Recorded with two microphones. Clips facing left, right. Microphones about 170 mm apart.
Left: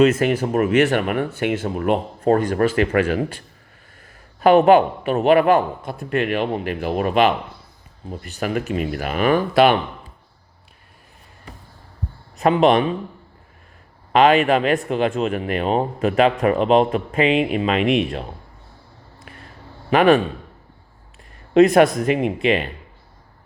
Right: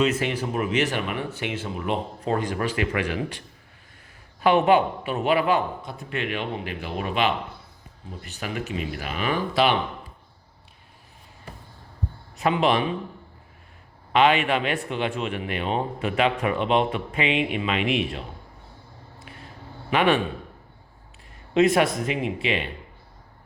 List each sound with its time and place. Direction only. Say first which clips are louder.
0.0 s speech: left 8 dB; 50° left (ahead or behind)
12.4 s speech: left 6 dB; 45° left (ahead or behind)
14.1 s speech: left 5 dB; 45° left (ahead or behind)
19.9 s speech: left 7 dB; 45° left (ahead or behind)
21.5 s speech: left 7 dB; 50° left (ahead or behind)
22.4 s speech: left 9 dB; 45° left (ahead or behind)